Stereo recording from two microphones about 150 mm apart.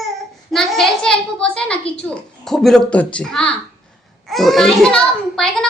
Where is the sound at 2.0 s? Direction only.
5° left (ahead or behind).